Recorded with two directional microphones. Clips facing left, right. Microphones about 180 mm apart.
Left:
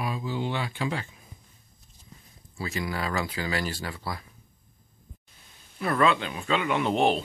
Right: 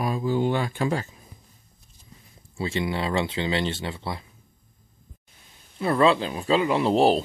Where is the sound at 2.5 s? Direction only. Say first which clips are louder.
Right 5 dB; 25° right (ahead or behind).